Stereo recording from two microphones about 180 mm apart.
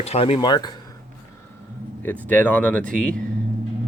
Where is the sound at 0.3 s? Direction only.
25° left (ahead or behind).